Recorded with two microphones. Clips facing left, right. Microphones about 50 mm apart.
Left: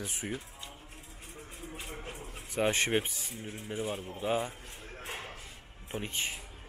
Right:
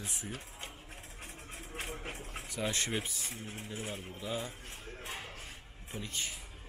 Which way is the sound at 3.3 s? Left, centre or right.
Right.